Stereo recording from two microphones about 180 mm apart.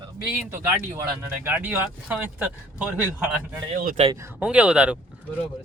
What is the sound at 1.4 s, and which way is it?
Speech, 10° right (ahead or behind).